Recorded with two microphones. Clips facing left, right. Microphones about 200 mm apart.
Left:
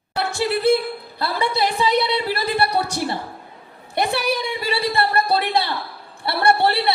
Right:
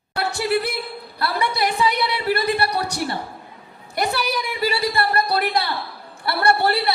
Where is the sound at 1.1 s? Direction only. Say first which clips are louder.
Left 1 dB; 25° left (ahead or behind).